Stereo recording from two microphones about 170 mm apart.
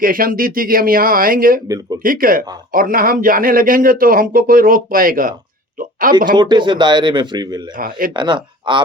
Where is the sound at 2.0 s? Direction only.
55° right (ahead or behind).